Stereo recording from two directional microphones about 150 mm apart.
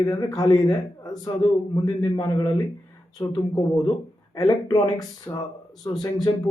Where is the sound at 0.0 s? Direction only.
25° left (ahead or behind).